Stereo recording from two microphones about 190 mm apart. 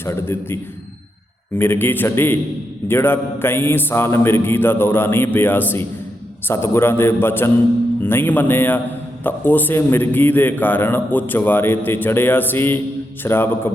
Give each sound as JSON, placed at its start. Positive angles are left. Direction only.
{"t": 0.0, "sound": "a man's voice", "side_deg": 15}